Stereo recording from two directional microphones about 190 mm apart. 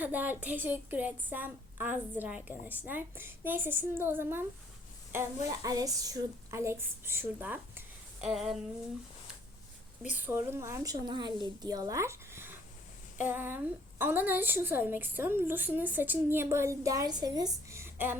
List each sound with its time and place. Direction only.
0.0 s a woman's voice: 10° right (ahead or behind)
10.0 s a woman's voice: 10° right (ahead or behind)